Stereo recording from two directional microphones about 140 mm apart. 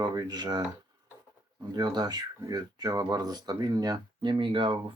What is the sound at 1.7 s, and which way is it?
Speech, 30° right (ahead or behind).